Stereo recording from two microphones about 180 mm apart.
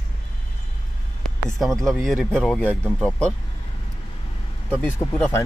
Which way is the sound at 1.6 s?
Centre (ahead or behind).